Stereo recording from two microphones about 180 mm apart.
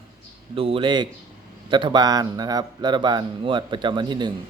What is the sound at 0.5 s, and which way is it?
Speech, 30° right (ahead or behind).